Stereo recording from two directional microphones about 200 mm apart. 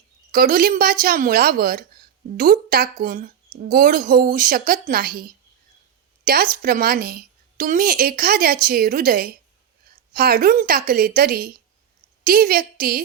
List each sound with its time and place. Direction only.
0.3 s a woman's voice: 45° right (ahead or behind)